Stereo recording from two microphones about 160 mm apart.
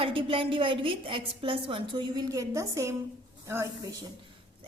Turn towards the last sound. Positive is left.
turn(degrees=-15)  # may be behind; listen again after turning